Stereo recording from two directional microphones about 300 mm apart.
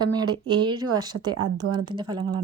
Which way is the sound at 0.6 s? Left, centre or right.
Centre.